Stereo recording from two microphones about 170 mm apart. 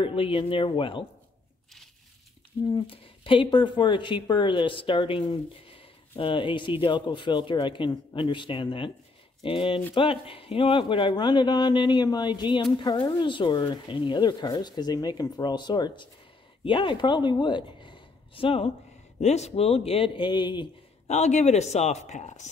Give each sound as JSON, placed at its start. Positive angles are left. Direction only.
{"t": 0.0, "sound": "a man's voice", "side_deg": 30}
{"t": 2.6, "sound": "a man's voice", "side_deg": 30}
{"t": 21.1, "sound": "a man's voice", "side_deg": 45}